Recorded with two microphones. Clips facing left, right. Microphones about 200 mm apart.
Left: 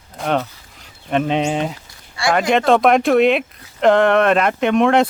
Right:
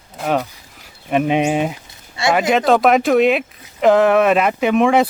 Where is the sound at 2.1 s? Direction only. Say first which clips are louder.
Right 1 dB; 20° right (ahead or behind).